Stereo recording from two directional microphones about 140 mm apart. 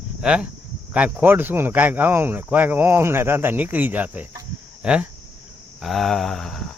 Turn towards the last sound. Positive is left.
turn(degrees=5)  # may be behind; listen again after turning